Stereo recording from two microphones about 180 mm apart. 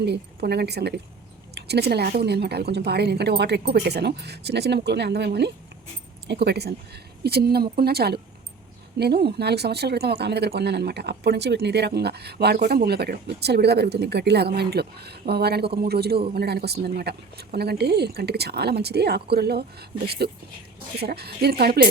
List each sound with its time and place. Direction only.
0.0 s speech: 65° right (ahead or behind)